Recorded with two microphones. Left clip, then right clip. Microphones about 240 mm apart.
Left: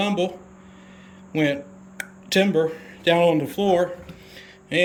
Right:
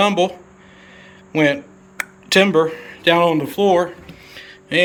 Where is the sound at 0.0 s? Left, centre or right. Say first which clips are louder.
Right 8 dB; centre.